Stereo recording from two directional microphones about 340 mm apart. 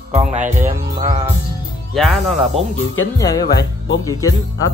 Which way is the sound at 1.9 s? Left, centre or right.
Centre.